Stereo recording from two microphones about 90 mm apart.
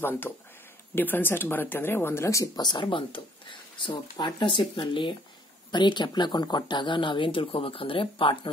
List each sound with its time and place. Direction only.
0.3 s speech: 25° left (ahead or behind); by 5.1 s 70° left (ahead or behind)
5.7 s speech: 55° left (ahead or behind); by 8.4 s 75° left (ahead or behind)